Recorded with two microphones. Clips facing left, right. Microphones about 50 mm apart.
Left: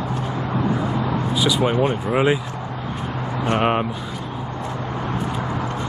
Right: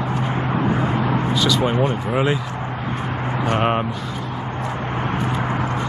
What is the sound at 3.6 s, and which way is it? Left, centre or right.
Speech, centre.